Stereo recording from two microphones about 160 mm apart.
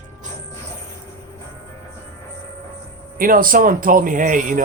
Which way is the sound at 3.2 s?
60° right (ahead or behind).